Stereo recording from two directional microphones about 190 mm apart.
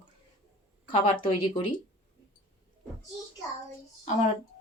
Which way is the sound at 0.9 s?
30° left (ahead or behind).